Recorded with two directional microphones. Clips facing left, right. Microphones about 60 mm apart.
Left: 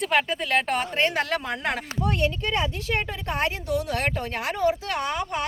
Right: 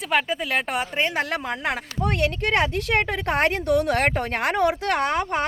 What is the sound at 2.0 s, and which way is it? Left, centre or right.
A woman's voice, right.